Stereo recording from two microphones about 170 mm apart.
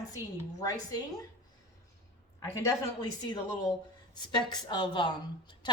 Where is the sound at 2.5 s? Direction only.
20° left (ahead or behind).